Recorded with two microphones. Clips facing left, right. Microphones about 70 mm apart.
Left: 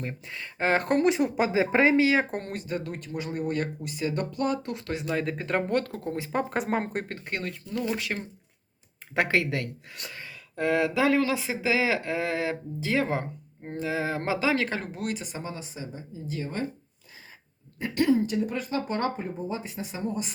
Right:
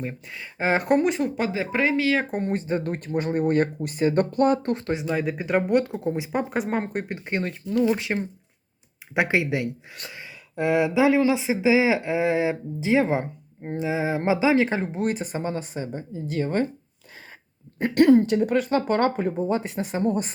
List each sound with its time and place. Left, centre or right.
0.0 s speech: centre
1.0 s speech: centre
1.4 s speech: left
2.5 s speech: right
5.0 s speech: centre
6.5 s speech: centre
7.1 s speech: centre
15.0 s speech: right
17.7 s speech: right